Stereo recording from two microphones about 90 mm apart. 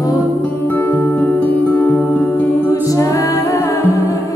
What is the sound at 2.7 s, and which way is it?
Music, 40° left (ahead or behind).